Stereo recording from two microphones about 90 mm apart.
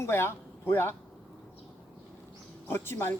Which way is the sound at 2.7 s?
25° left (ahead or behind).